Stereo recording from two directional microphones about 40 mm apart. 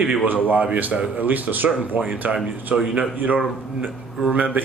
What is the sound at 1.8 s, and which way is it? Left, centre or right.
Speech, right.